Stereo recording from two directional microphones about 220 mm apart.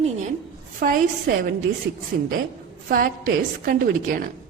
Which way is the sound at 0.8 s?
40° right (ahead or behind).